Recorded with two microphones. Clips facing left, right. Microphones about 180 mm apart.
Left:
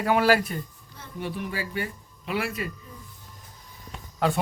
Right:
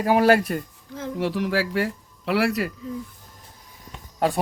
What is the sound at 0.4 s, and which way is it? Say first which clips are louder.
Speech: right 6 dB; 80° right.